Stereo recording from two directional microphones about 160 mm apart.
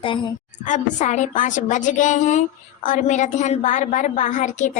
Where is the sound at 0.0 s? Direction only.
30° left (ahead or behind).